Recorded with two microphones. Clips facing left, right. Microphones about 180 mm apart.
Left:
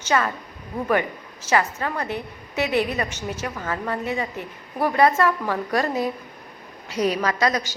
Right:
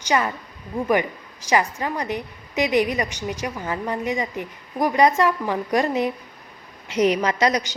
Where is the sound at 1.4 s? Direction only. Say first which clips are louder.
Right 1 dB; 15° right (ahead or behind).